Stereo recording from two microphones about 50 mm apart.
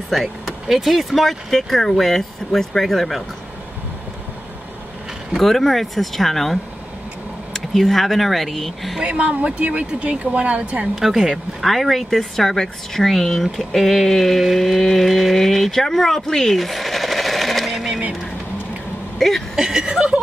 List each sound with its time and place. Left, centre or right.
0.1 s speech: centre
5.4 s speech: centre
9.0 s speech: right
11.0 s speech: centre
19.1 s speech: centre
19.5 s speech: centre